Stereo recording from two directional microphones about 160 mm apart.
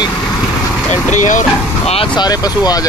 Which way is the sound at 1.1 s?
50° left (ahead or behind).